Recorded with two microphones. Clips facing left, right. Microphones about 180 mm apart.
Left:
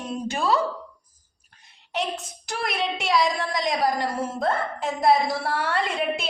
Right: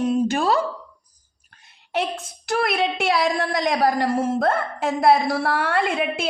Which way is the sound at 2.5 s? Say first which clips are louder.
Right 6 dB; 60° right (ahead or behind).